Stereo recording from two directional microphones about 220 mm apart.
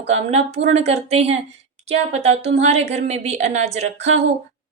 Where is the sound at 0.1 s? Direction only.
30° right (ahead or behind).